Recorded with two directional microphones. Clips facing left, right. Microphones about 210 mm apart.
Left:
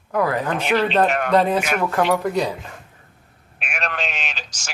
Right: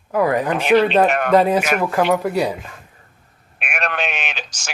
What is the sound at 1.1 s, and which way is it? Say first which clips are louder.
Speech: right 2 dB; 60° right (ahead or behind).